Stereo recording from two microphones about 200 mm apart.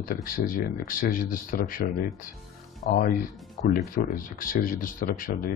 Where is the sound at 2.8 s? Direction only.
45° left (ahead or behind).